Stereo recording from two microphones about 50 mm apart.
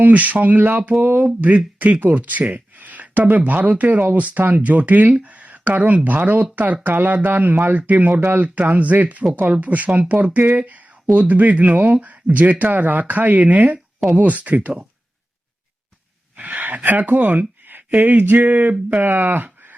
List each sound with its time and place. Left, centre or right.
0.0 s speech: right
16.4 s speech: right
19.0 s speech: right